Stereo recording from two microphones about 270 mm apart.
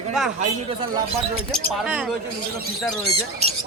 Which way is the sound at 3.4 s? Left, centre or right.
Right.